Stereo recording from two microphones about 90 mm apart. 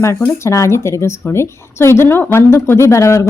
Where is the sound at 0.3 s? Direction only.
35° left (ahead or behind).